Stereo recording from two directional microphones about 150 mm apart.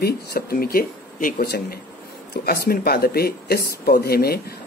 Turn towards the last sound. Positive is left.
turn(degrees=90)